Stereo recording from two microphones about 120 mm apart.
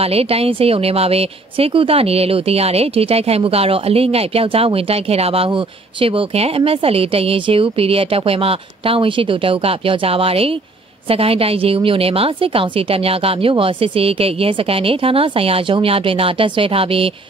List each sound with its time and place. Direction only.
0.0 s a woman's voice: 55° right (ahead or behind)